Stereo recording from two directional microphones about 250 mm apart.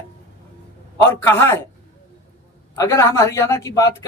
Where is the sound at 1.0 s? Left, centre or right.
Centre.